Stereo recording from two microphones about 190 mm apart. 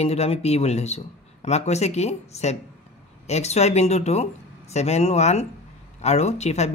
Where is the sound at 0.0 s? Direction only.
35° left (ahead or behind).